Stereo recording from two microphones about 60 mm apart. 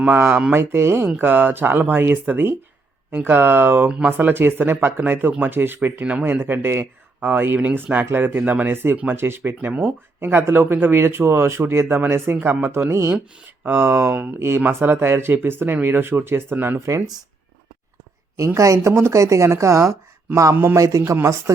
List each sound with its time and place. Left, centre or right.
0.1 s speech: right
1.0 s speech: right
3.8 s speech: centre
4.2 s speech: right
12.4 s speech: right
12.9 s speech: right
13.7 s speech: right
14.3 s speech: right
18.4 s speech: right